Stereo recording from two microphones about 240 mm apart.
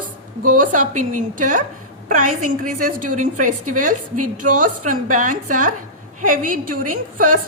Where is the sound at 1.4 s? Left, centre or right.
Right.